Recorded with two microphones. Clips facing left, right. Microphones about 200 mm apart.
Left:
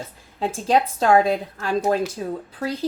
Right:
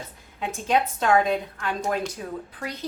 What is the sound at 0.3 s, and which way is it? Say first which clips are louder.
Speech: left 4 dB; 35° left (ahead or behind).